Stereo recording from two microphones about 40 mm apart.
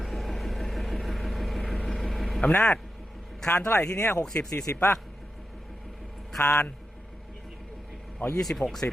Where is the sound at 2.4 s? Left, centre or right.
Left.